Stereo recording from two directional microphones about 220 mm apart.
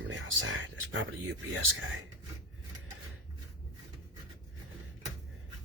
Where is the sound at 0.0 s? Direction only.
60° right (ahead or behind).